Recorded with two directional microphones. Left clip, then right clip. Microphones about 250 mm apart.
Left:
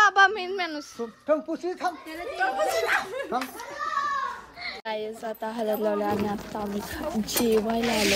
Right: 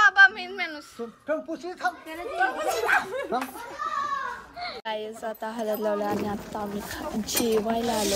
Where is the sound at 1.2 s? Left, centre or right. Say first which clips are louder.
Left 4 dB; left.